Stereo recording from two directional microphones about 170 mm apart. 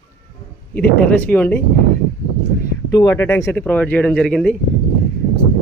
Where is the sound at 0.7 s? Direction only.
10° left (ahead or behind).